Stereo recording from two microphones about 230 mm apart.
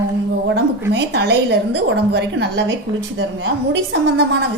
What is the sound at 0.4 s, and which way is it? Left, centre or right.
A woman's voice, right.